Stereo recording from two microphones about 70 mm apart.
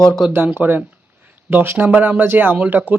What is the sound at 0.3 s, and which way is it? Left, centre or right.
Speech, right.